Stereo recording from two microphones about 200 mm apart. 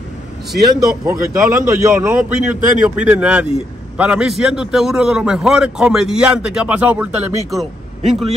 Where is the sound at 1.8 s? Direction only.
10° right (ahead or behind).